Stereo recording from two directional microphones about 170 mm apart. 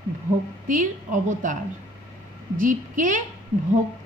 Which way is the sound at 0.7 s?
50° right (ahead or behind).